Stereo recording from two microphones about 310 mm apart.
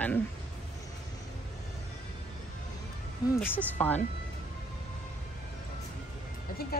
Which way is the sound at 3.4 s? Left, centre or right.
Centre.